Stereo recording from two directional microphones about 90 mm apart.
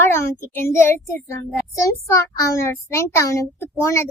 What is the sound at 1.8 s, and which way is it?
A child's voice, 35° left (ahead or behind).